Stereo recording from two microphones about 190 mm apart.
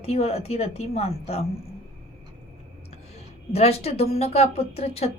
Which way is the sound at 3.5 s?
35° left (ahead or behind).